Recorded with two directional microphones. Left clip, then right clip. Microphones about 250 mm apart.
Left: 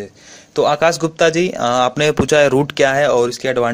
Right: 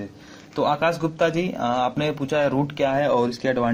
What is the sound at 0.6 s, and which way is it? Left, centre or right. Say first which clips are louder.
Speech: left 7 dB; left.